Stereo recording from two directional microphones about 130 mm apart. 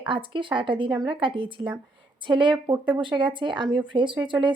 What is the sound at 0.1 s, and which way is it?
A woman's voice, 40° right (ahead or behind).